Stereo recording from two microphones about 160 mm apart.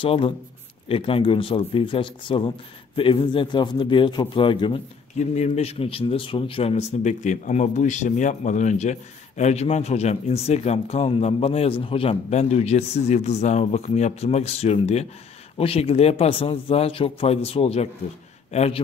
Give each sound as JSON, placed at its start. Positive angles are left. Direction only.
{"t": 0.0, "sound": "speech", "side_deg": 35}
{"t": 5.2, "sound": "speech", "side_deg": 45}